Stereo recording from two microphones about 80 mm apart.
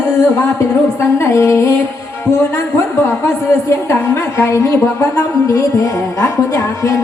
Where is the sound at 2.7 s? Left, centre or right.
Left.